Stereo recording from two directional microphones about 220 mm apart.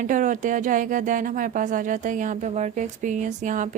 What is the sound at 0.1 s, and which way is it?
Speech, 35° right (ahead or behind).